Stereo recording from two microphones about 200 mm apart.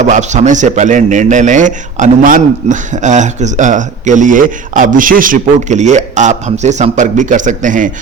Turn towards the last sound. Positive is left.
turn(degrees=-40)  # may be behind; listen again after turning